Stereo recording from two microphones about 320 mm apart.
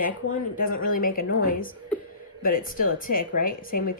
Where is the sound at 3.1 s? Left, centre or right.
Left.